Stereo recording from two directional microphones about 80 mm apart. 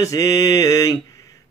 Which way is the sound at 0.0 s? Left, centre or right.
Left.